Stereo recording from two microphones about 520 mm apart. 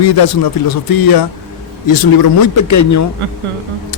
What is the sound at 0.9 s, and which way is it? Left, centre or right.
A man's voice, left.